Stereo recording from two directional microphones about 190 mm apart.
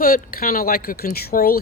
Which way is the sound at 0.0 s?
50° left (ahead or behind).